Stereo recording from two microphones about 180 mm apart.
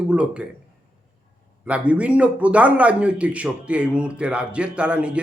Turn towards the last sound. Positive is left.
turn(degrees=-5)  # may be behind; listen again after turning